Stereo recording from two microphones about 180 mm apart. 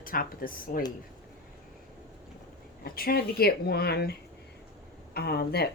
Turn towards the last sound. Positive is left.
turn(degrees=65)  # may be behind; listen again after turning